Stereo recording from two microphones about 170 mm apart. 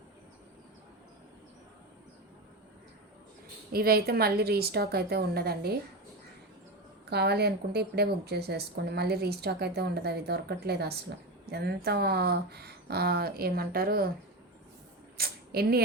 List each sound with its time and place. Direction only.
3.7 s a woman's voice: 65° right (ahead or behind)
7.1 s a woman's voice: 70° right (ahead or behind)
15.2 s a sound: 65° right (ahead or behind)